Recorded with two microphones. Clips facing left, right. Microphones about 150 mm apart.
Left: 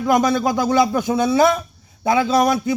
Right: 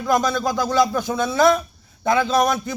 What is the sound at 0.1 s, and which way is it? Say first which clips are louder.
A man's voice: left 3 dB; 20° left (ahead or behind).